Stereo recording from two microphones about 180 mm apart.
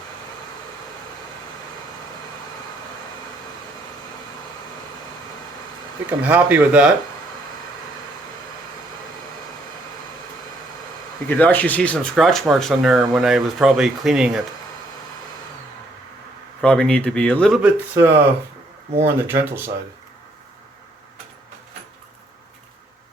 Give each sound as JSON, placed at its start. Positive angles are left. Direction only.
{"t": 6.1, "sound": "speech", "side_deg": -10}
{"t": 11.3, "sound": "speech", "side_deg": 10}
{"t": 16.6, "sound": "speech", "side_deg": 5}
{"t": 17.6, "sound": "speech", "side_deg": -10}